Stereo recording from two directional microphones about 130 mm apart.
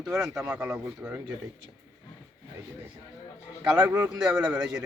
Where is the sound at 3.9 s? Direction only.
15° right (ahead or behind).